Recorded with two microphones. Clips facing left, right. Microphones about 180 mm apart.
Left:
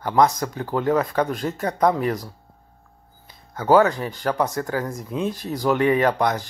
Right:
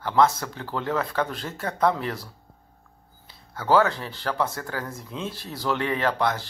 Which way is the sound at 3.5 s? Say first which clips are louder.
Left 4 dB; 20° left (ahead or behind).